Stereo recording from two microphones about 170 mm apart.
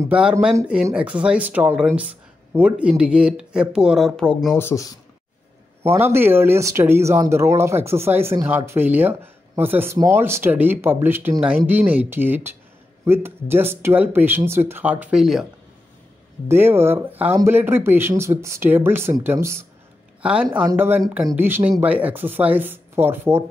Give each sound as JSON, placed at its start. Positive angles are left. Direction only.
{"t": 0.1, "sound": "speech", "side_deg": -5}
{"t": 4.6, "sound": "speech", "side_deg": 15}
{"t": 5.9, "sound": "speech", "side_deg": -15}
{"t": 16.4, "sound": "speech", "side_deg": -15}